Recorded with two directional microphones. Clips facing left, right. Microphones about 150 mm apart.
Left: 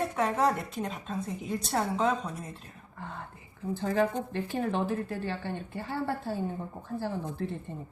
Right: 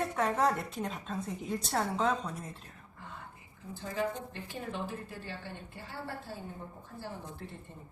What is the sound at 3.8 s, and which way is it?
Speech, 75° left (ahead or behind).